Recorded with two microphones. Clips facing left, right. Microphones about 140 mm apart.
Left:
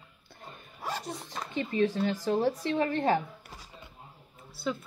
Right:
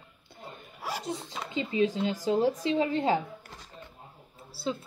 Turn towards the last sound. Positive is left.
turn(degrees=-30)  # may be behind; listen again after turning